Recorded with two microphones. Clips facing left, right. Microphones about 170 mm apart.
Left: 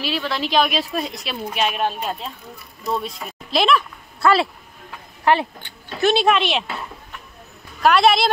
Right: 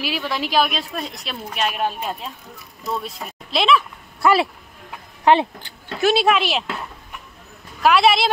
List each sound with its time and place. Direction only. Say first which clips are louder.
0.0 s speech: left 1 dB; 10° right (ahead or behind)
3.5 s speech: even; centre (ahead or behind)
4.2 s speech: even; 15° right (ahead or behind)
5.9 s speech: even; 5° right (ahead or behind)
7.8 s speech: even; 5° right (ahead or behind)